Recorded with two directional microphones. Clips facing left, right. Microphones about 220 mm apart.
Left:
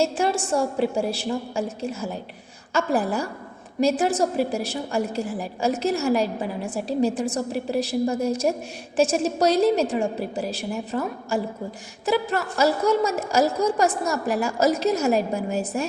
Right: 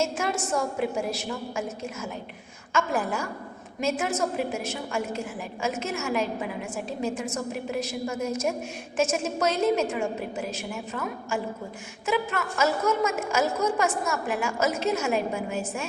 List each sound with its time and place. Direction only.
0.0 s a woman's voice: 30° left (ahead or behind)